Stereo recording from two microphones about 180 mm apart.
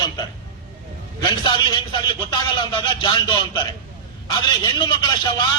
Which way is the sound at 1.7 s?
25° left (ahead or behind).